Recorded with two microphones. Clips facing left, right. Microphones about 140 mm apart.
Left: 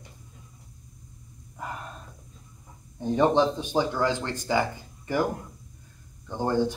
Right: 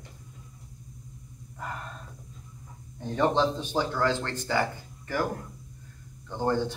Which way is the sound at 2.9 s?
15° left (ahead or behind).